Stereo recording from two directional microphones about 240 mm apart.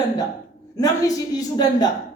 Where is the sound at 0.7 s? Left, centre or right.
Centre.